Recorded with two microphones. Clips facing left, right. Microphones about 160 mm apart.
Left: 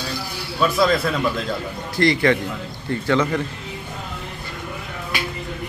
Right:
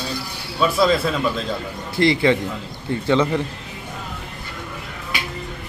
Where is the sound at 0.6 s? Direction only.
Centre (ahead or behind).